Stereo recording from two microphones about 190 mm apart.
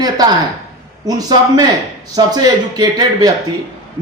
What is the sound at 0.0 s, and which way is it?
A man's voice, 20° right (ahead or behind).